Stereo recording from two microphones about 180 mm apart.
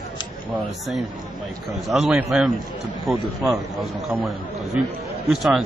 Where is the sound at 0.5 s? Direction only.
Centre (ahead or behind).